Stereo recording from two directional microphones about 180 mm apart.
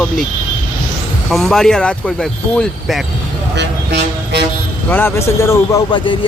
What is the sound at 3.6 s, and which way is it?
Speech, 70° right (ahead or behind).